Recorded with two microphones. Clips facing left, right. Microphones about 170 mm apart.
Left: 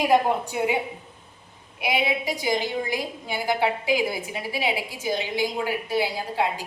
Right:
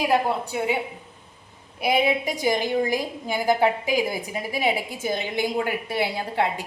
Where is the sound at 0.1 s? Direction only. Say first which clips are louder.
Left 2 dB; 15° left (ahead or behind).